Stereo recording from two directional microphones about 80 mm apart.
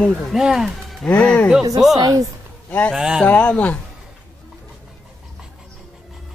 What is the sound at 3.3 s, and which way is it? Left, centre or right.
Speech, centre.